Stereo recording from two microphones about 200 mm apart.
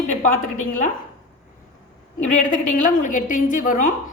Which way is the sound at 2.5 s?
40° left (ahead or behind).